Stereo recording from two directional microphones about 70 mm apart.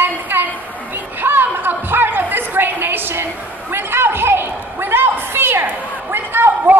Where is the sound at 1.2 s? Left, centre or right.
Right.